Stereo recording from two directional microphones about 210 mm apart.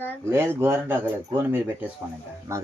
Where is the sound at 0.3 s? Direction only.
10° right (ahead or behind).